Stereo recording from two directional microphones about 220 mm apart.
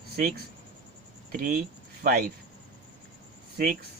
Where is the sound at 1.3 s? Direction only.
40° right (ahead or behind).